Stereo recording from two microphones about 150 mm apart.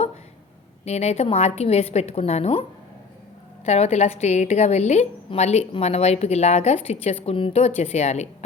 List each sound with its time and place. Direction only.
0.9 s a woman's voice: 45° left (ahead or behind)
3.7 s a woman's voice: 45° left (ahead or behind)